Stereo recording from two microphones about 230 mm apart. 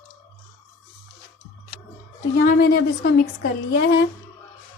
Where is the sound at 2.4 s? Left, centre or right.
Left.